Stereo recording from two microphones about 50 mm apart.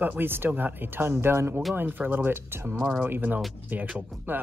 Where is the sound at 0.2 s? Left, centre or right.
Right.